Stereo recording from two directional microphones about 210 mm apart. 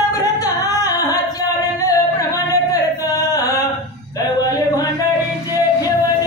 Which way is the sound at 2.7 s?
15° left (ahead or behind).